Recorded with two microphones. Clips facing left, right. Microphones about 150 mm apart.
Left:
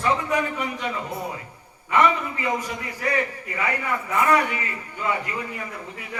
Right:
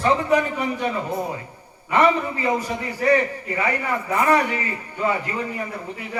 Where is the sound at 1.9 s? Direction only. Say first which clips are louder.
Right 2 dB; 35° right (ahead or behind).